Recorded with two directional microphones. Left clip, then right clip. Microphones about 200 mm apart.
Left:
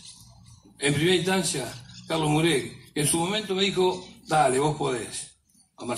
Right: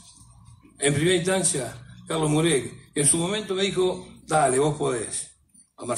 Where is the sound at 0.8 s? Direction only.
45° left (ahead or behind).